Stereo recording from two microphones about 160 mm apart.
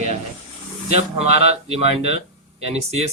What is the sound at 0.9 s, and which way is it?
Speech, 40° right (ahead or behind).